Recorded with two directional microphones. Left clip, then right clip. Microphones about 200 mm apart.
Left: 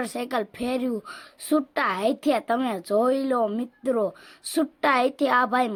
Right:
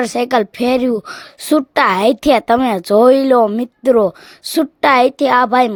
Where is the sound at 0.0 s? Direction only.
45° right (ahead or behind).